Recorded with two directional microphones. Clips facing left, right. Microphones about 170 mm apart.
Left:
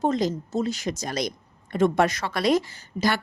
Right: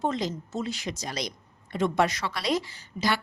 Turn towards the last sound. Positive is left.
turn(degrees=50)  # may be behind; listen again after turning